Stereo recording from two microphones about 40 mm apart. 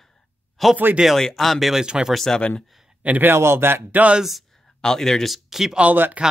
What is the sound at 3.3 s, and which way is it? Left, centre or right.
Speech, right.